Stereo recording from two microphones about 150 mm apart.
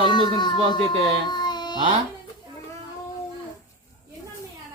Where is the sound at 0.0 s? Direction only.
30° left (ahead or behind).